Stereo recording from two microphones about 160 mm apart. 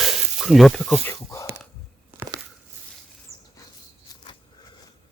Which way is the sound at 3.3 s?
40° right (ahead or behind).